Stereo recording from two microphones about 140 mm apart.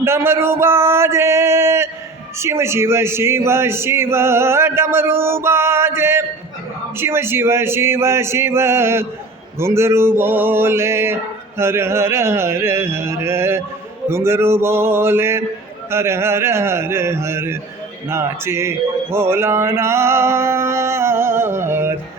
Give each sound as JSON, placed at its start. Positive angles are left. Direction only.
{"t": 0.0, "sound": "male singing", "side_deg": -20}
{"t": 18.1, "sound": "a man's voice", "side_deg": -20}
{"t": 19.1, "sound": "mantra", "side_deg": -20}